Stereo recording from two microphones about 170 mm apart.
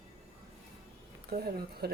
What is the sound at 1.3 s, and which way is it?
Speech, 65° right (ahead or behind).